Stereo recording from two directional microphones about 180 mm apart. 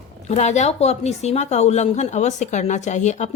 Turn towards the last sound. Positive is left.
turn(degrees=40)  # may be behind; listen again after turning